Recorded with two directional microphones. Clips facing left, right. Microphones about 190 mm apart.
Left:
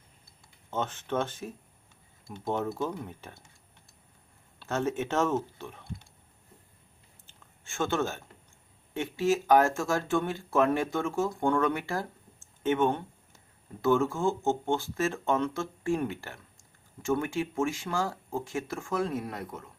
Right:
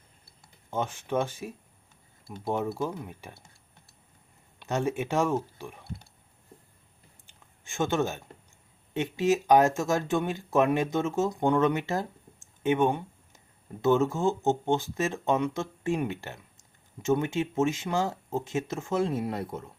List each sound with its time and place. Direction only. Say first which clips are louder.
0.7 s speech: right 2 dB; 10° right (ahead or behind)
4.6 s speech: right 1 dB; 15° right (ahead or behind)
7.3 s a sound: right 1 dB; 15° right (ahead or behind)
8.9 s speech: right 2 dB; 20° right (ahead or behind)
12.6 s a sound: right 2 dB; 15° right (ahead or behind)
13.8 s speech: right 2 dB; 20° right (ahead or behind)